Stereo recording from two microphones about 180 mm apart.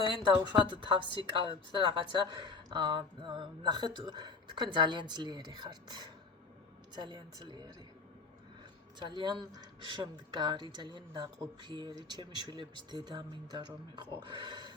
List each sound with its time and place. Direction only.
0.2 s a woman's voice: 25° right (ahead or behind)
9.0 s a woman's voice: 25° right (ahead or behind)